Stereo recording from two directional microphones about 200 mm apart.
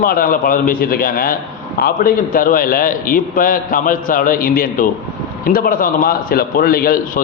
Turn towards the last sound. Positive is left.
turn(degrees=45)  # may be behind; listen again after turning